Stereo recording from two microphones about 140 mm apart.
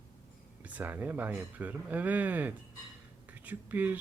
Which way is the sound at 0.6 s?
10° right (ahead or behind).